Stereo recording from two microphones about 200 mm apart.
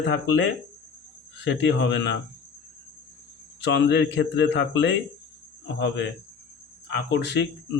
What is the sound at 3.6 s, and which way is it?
Speech, 60° left (ahead or behind).